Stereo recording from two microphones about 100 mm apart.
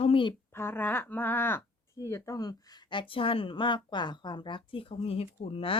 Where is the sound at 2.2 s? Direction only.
40° left (ahead or behind).